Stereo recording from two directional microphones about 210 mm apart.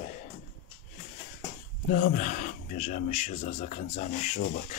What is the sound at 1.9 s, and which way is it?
Speech, 40° left (ahead or behind).